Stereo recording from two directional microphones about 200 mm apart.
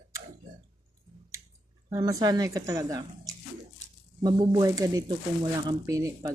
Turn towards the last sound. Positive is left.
turn(degrees=-15)  # may be behind; listen again after turning